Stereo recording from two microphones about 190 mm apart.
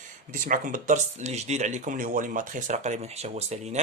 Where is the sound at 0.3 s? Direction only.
45° right (ahead or behind).